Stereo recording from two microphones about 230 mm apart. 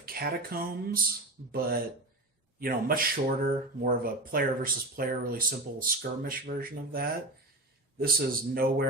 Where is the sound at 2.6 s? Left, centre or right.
Right.